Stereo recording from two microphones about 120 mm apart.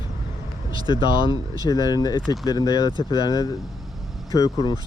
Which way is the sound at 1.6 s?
30° left (ahead or behind).